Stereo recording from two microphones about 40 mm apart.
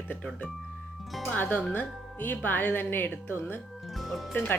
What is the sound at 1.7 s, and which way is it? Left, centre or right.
A woman's voice, left.